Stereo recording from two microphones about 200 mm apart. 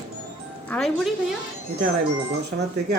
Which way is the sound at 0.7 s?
Centre (ahead or behind).